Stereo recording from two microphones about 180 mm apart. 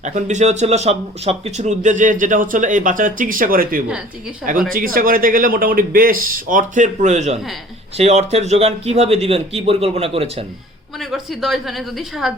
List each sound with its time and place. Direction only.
0.0 s a man's voice: 40° right (ahead or behind)
11.0 s a woman's voice: centre (ahead or behind)